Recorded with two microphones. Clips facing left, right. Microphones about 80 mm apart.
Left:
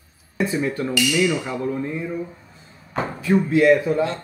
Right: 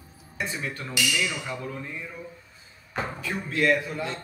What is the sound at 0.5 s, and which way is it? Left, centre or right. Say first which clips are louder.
Speech: left 10 dB; centre.